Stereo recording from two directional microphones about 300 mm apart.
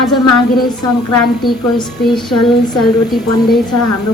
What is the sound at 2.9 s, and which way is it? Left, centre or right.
Speech, centre.